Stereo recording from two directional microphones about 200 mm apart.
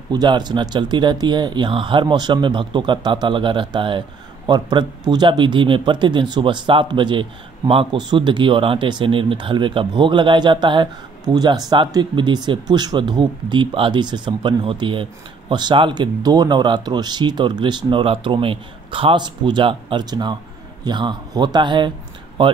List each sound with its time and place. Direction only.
0.1 s speech: 20° right (ahead or behind)